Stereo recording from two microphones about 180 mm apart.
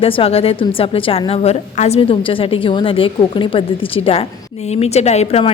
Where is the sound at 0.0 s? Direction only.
30° left (ahead or behind).